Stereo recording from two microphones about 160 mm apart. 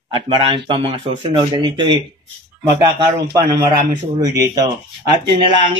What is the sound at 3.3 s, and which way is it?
A man's voice, 25° right (ahead or behind).